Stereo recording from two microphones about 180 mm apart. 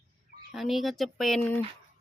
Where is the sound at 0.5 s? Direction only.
Centre (ahead or behind).